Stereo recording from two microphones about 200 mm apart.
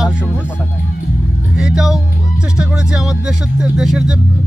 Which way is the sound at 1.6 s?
5° right (ahead or behind).